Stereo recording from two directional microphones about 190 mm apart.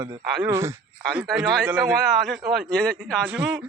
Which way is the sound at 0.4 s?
15° right (ahead or behind).